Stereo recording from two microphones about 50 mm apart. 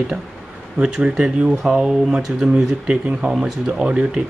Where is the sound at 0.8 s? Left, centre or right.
Centre.